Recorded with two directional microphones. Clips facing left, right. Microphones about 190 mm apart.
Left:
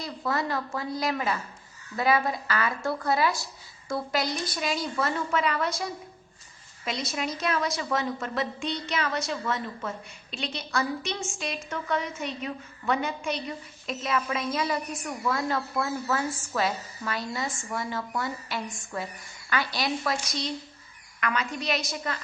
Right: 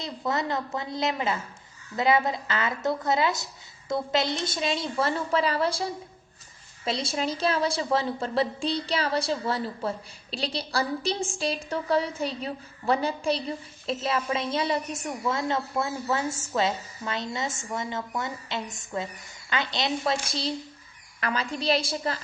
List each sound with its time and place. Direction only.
0.0 s a woman's voice: 20° right (ahead or behind)